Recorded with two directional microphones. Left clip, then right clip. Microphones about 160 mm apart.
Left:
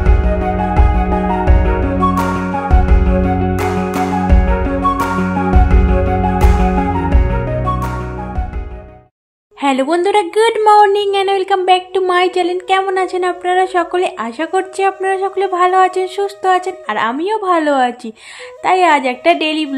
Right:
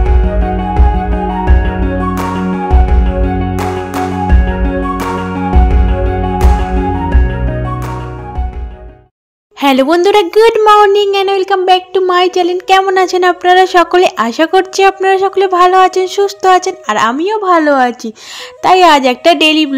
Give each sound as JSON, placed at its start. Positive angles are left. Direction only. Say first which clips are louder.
{"t": 0.0, "sound": "music", "louder": "right 1 dB", "side_deg": 0}
{"t": 9.6, "sound": "speech", "louder": "right 5 dB", "side_deg": -35}
{"t": 10.5, "sound": "a woman's voice", "louder": "left 1 dB", "side_deg": -20}
{"t": 18.6, "sound": "a woman's voice", "louder": "right 5 dB", "side_deg": -40}